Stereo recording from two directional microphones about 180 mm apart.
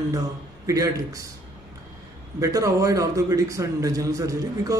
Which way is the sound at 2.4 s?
20° right (ahead or behind).